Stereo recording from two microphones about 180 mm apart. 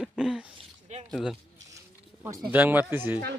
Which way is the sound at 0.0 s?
5° right (ahead or behind).